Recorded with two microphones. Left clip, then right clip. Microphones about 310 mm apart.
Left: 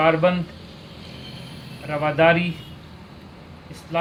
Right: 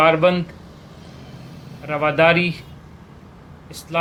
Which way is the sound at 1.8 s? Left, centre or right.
Right.